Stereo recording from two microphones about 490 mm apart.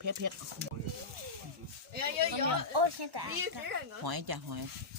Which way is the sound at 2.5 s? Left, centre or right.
Right.